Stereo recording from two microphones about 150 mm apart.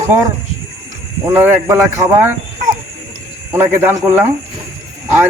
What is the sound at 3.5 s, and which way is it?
Speech, 15° right (ahead or behind).